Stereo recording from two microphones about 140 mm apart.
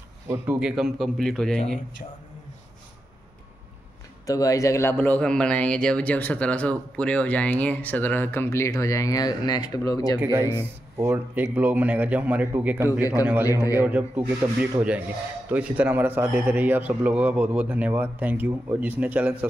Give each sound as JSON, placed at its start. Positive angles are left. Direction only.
{"t": 0.5, "sound": "a man's voice", "side_deg": -5}
{"t": 4.3, "sound": "speech", "side_deg": 25}
{"t": 10.1, "sound": "a man's voice", "side_deg": -15}